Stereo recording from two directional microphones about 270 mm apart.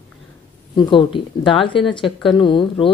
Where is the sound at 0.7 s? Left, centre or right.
Centre.